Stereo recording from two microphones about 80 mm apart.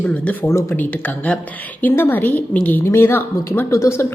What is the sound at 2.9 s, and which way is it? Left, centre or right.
Speech, left.